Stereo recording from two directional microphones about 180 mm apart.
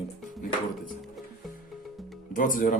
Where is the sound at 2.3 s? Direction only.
50° left (ahead or behind).